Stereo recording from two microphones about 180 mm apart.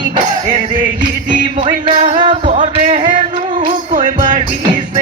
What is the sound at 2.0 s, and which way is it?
Music, 25° right (ahead or behind).